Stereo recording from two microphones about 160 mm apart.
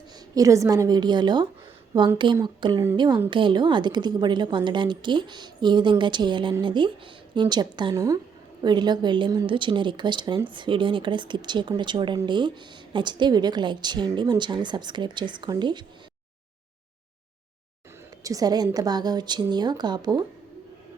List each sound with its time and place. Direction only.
0.3 s a woman's voice: 20° right (ahead or behind)
18.2 s a woman's voice: 20° right (ahead or behind)